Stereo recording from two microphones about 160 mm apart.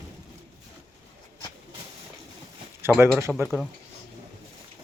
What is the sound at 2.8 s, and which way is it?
Speech, 15° right (ahead or behind).